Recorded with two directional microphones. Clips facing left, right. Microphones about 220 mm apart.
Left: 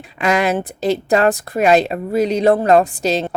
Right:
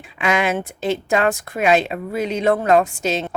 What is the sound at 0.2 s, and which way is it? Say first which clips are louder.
Speech: left 3 dB; 40° left (ahead or behind).